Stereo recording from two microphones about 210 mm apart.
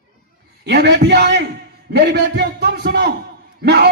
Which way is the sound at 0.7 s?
50° right (ahead or behind).